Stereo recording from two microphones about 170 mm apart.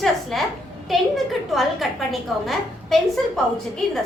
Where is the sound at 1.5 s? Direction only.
Centre (ahead or behind).